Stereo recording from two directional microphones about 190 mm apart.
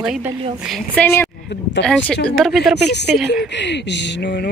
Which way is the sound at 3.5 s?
65° left (ahead or behind).